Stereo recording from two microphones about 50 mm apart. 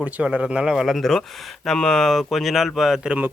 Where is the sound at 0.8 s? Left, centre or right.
Centre.